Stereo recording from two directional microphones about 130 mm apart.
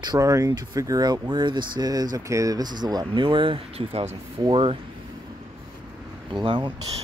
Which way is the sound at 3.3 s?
45° right (ahead or behind).